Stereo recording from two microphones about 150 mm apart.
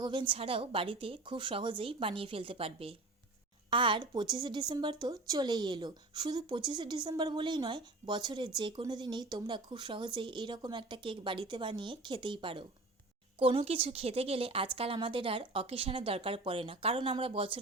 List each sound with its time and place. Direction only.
0.0 s speech: 30° right (ahead or behind)